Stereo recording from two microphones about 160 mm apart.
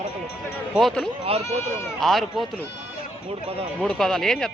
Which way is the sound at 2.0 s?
Centre (ahead or behind).